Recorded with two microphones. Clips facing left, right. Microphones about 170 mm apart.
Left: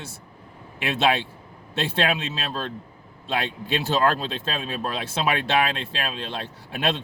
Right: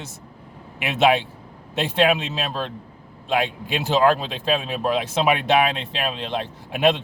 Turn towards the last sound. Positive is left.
turn(degrees=-15)  # may be behind; listen again after turning